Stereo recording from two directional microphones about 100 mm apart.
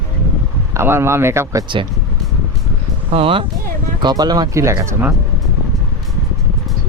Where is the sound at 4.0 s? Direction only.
45° right (ahead or behind).